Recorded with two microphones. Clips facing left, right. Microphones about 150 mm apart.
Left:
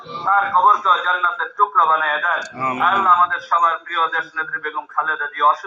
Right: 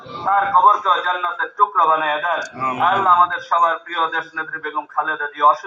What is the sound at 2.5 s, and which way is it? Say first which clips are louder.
Speech: left 1 dB; centre (ahead or behind).